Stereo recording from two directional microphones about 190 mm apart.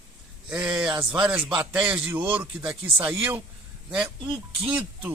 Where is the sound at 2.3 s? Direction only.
5° right (ahead or behind).